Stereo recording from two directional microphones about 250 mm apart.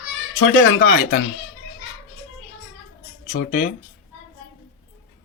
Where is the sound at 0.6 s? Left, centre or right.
Left.